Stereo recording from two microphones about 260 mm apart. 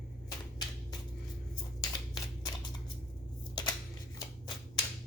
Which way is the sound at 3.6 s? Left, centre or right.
Centre.